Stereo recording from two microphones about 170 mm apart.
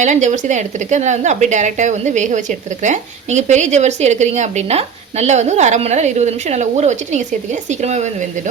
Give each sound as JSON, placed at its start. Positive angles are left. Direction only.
{"t": 0.0, "sound": "speech", "side_deg": -45}